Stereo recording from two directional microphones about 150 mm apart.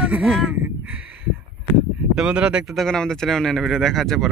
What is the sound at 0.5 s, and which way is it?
Speech, 10° right (ahead or behind).